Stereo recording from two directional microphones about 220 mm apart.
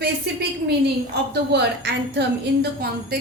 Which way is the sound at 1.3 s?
50° right (ahead or behind).